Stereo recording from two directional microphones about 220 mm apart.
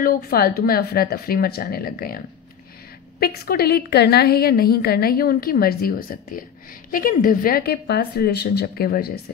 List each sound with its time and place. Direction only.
0.0 s a woman's voice: 45° left (ahead or behind)